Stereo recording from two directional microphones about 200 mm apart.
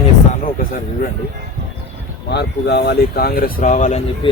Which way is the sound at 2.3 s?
55° left (ahead or behind).